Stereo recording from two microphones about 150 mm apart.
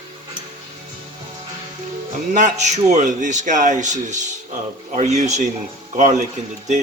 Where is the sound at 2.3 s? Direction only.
55° right (ahead or behind).